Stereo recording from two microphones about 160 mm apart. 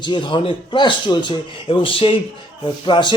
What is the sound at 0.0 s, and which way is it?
A man's voice, 30° left (ahead or behind).